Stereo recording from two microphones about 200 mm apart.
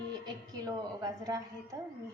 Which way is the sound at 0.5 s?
15° right (ahead or behind).